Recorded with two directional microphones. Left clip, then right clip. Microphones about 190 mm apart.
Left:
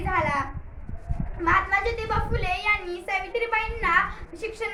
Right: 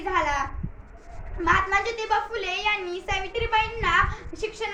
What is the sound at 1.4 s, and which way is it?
A child's voice, 20° left (ahead or behind).